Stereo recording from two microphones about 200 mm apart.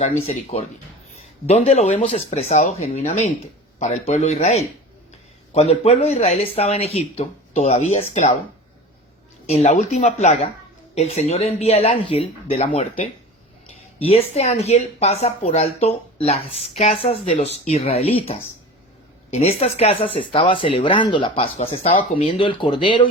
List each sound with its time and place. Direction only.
0.0 s speech: 35° left (ahead or behind)
9.5 s speech: 35° left (ahead or behind)